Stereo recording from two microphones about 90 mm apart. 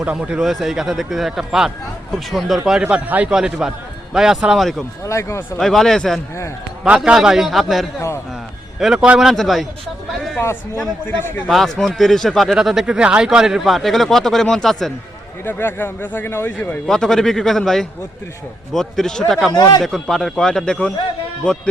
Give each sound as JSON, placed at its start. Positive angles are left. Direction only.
{"t": 0.0, "sound": "speech", "side_deg": -15}
{"t": 2.8, "sound": "speech", "side_deg": -15}
{"t": 5.0, "sound": "speech", "side_deg": 35}
{"t": 5.5, "sound": "speech", "side_deg": 5}
{"t": 6.8, "sound": "speech", "side_deg": -10}
{"t": 11.0, "sound": "a man's voice", "side_deg": 25}
{"t": 11.4, "sound": "speech", "side_deg": 0}
{"t": 15.4, "sound": "a man's voice", "side_deg": 25}
{"t": 16.8, "sound": "speech", "side_deg": 5}
{"t": 19.5, "sound": "a man's voice", "side_deg": 50}
{"t": 19.8, "sound": "speech", "side_deg": 5}